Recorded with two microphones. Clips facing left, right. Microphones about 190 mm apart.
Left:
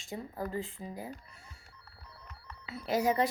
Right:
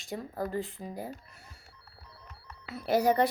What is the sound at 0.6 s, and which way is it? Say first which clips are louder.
Speech: right 3 dB; 70° right (ahead or behind).